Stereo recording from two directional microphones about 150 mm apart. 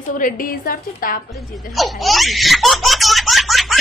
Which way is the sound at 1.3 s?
Centre (ahead or behind).